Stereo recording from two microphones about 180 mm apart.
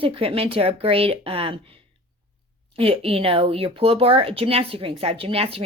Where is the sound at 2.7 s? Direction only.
30° right (ahead or behind).